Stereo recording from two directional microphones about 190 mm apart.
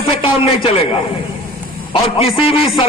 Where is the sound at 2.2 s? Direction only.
30° left (ahead or behind).